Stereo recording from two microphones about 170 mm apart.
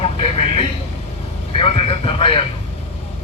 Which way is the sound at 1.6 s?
35° left (ahead or behind).